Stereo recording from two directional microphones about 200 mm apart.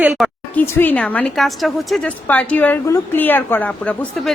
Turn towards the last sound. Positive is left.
turn(degrees=5)  # may be behind; listen again after turning